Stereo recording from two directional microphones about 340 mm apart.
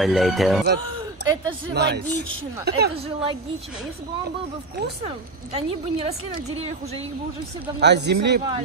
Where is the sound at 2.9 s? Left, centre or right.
Centre.